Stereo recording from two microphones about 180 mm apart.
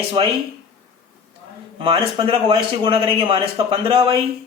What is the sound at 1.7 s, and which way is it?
Speech, 30° right (ahead or behind).